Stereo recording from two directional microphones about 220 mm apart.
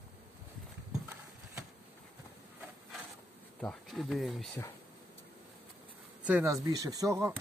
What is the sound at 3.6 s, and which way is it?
Speech, centre (ahead or behind).